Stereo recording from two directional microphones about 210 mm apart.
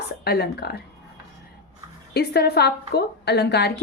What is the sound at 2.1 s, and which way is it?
A woman's voice, 50° left (ahead or behind).